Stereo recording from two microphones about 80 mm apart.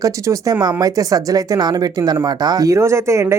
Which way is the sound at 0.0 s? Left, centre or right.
Right.